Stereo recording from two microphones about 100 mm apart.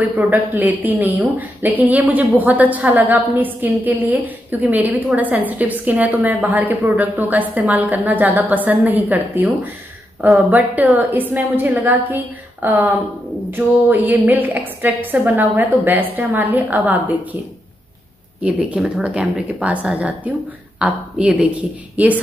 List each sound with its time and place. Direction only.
0.0 s a woman's voice: 20° right (ahead or behind)
18.4 s a woman's voice: 10° right (ahead or behind)